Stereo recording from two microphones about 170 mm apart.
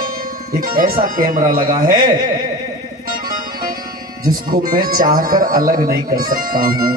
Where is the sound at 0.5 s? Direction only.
55° right (ahead or behind).